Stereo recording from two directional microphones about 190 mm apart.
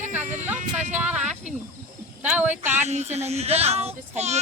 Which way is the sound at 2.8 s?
35° right (ahead or behind).